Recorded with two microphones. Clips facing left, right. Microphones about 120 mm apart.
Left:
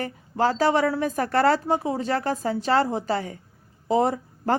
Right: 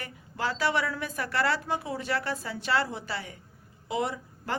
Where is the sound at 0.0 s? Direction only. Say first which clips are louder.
Left 9 dB; 40° left (ahead or behind).